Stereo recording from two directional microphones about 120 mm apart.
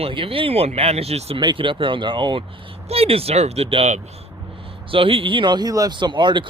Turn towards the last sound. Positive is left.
turn(degrees=-40)  # may be behind; listen again after turning